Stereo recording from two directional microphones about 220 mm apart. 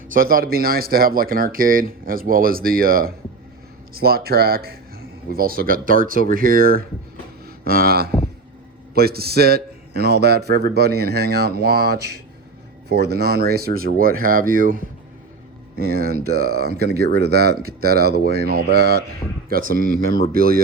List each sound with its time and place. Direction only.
0.1 s speech: 40° right (ahead or behind)